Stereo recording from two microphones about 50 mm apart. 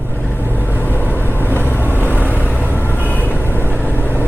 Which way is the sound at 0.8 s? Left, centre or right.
Left.